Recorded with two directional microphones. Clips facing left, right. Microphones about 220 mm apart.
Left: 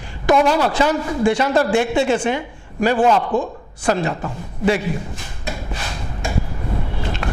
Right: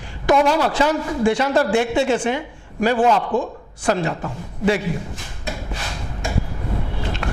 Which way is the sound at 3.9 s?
20° left (ahead or behind).